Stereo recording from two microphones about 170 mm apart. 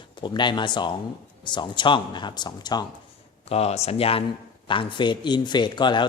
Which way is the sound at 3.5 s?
35° left (ahead or behind).